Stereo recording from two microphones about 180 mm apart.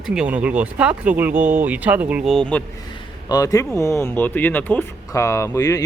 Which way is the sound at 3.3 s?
20° left (ahead or behind).